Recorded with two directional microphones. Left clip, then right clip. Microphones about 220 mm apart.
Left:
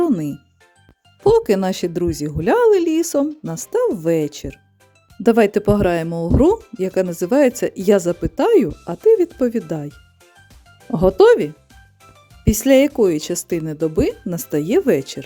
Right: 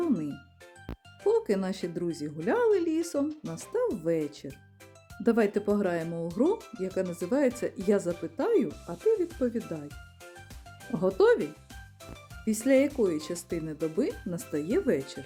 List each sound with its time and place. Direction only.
0.0 s music: 35° left (ahead or behind)
1.2 s speech: 40° left (ahead or behind)
11.2 s speech: 40° left (ahead or behind)
12.5 s speech: 40° left (ahead or behind)